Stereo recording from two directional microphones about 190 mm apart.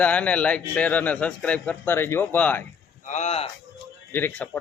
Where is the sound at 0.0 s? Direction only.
5° left (ahead or behind).